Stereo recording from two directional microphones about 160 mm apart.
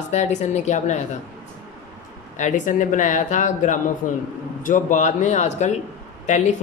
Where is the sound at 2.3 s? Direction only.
50° left (ahead or behind).